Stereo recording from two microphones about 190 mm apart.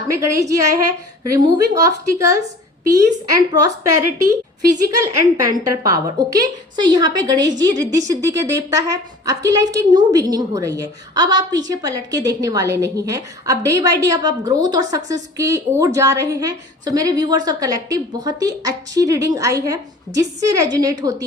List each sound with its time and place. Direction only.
0.2 s a woman's voice: 15° right (ahead or behind)